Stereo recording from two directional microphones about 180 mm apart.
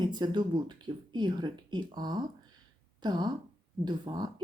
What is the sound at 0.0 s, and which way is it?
Speech, 25° right (ahead or behind).